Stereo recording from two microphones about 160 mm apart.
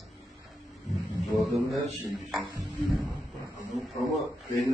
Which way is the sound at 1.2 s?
Centre (ahead or behind).